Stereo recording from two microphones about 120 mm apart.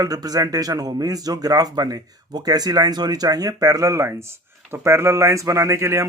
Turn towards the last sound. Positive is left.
turn(degrees=-25)  # may be behind; listen again after turning